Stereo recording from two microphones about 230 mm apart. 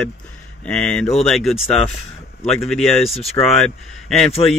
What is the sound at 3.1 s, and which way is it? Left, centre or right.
Speech, left.